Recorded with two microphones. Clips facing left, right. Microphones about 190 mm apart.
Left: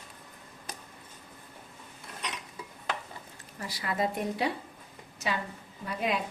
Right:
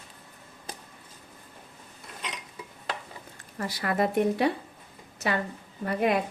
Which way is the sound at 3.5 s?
60° right (ahead or behind).